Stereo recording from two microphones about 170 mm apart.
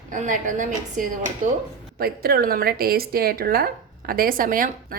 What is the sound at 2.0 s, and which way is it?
A woman's voice, 65° right (ahead or behind).